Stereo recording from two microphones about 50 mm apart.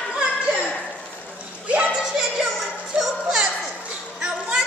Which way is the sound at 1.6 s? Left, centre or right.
Right.